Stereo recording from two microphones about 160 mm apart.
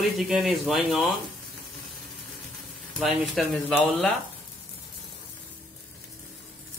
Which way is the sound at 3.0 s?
Centre (ahead or behind).